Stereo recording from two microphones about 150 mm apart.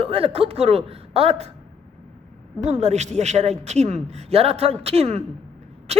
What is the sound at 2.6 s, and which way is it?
Speech, 50° right (ahead or behind).